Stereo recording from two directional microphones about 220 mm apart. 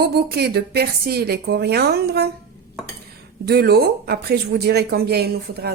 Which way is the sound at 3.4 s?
45° right (ahead or behind).